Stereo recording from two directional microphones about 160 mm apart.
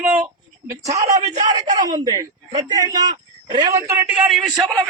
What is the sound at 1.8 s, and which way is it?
A man's voice, 25° right (ahead or behind).